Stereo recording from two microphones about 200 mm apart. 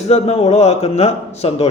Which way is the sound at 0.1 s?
30° left (ahead or behind).